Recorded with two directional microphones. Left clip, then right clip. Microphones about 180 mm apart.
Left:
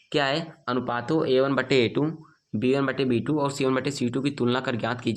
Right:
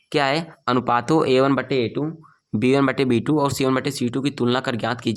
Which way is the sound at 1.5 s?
15° right (ahead or behind).